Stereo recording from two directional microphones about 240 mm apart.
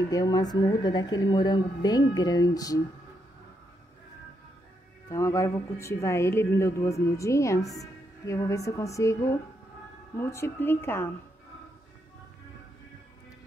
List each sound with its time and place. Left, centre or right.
0.1 s speech: centre
5.1 s speech: centre